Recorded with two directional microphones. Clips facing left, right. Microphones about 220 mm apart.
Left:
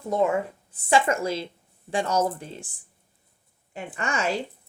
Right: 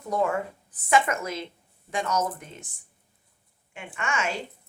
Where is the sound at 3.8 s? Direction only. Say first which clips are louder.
Left 2 dB; 35° left (ahead or behind).